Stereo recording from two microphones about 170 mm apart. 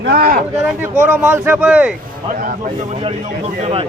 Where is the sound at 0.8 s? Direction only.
10° right (ahead or behind).